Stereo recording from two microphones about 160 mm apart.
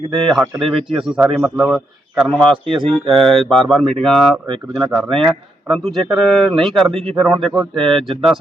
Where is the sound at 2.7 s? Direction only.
30° right (ahead or behind).